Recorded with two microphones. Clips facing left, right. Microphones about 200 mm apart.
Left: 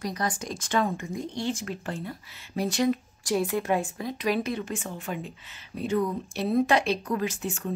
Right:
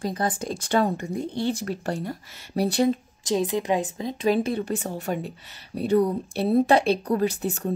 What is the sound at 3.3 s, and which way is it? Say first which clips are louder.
A woman's voice: right 2 dB; 20° right (ahead or behind).